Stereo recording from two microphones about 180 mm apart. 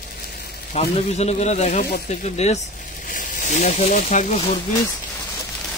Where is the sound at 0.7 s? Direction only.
35° left (ahead or behind).